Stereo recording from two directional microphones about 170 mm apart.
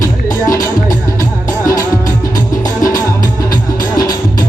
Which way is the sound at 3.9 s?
20° left (ahead or behind).